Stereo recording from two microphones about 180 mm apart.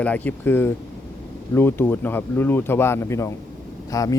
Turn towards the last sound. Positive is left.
turn(degrees=20)  # may be behind; listen again after turning